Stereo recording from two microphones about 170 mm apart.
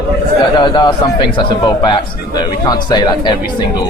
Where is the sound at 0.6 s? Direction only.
25° left (ahead or behind).